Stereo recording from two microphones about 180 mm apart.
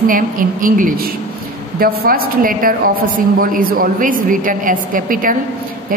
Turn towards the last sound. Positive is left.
turn(degrees=-50)  # may be behind; listen again after turning